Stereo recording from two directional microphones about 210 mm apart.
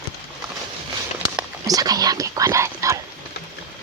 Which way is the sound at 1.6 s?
15° right (ahead or behind).